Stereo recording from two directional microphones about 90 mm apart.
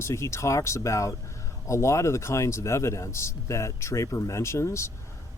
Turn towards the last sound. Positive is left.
turn(degrees=30)  # may be behind; listen again after turning